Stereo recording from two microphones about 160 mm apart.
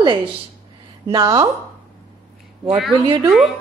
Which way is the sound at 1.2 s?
25° right (ahead or behind).